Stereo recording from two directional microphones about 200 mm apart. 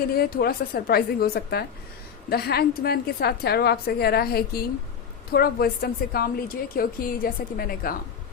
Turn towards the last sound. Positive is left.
turn(degrees=45)  # may be behind; listen again after turning